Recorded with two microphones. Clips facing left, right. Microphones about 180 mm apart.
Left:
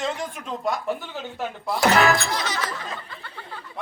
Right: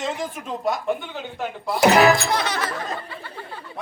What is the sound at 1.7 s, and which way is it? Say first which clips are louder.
Speech: right 4 dB; 20° right (ahead or behind).